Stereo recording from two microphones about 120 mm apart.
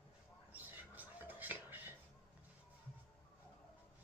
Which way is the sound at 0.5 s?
15° right (ahead or behind).